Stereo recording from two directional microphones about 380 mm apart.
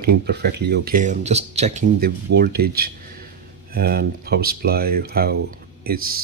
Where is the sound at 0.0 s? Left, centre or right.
Right.